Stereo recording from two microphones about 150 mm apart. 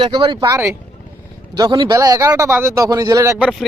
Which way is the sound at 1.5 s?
30° right (ahead or behind).